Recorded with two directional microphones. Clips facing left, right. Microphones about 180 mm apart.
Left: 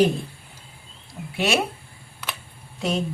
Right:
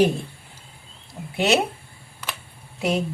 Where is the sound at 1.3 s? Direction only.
20° right (ahead or behind).